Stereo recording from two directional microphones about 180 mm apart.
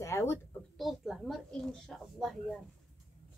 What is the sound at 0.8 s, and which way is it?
A woman's voice, centre (ahead or behind).